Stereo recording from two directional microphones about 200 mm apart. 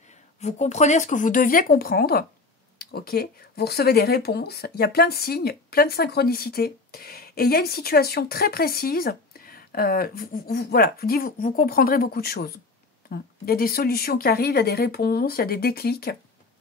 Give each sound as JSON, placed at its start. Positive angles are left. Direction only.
{"t": 0.4, "sound": "speech", "side_deg": 35}